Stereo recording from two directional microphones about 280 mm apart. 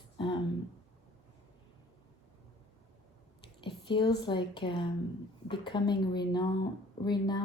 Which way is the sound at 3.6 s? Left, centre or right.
Centre.